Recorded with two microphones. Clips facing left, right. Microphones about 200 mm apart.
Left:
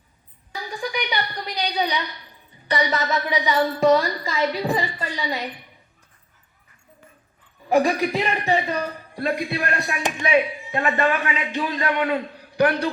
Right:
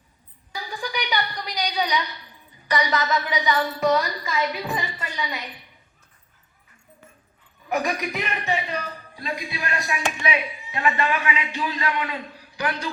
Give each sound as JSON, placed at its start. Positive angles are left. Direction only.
{"t": 0.8, "sound": "a woman's voice", "side_deg": 25}
{"t": 7.7, "sound": "a woman's voice", "side_deg": 30}
{"t": 9.1, "sound": "a man's voice", "side_deg": 60}